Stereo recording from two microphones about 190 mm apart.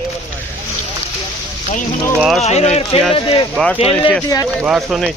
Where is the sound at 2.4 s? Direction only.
35° left (ahead or behind).